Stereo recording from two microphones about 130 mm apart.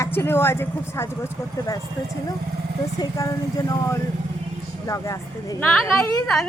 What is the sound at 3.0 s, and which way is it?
Speech, 30° left (ahead or behind).